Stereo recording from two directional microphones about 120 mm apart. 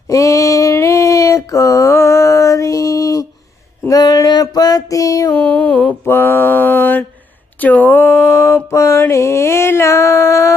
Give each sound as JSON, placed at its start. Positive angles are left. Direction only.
{"t": 0.1, "sound": "female singing", "side_deg": 25}
{"t": 3.8, "sound": "a sound", "side_deg": 30}
{"t": 5.3, "sound": "mantra", "side_deg": 15}